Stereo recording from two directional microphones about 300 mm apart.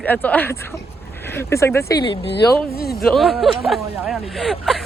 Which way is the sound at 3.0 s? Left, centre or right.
Centre.